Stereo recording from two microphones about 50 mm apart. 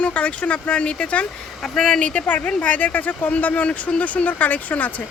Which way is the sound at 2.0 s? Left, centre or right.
Left.